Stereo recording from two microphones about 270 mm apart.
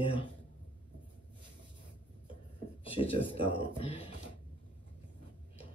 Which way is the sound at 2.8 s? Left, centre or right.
Left.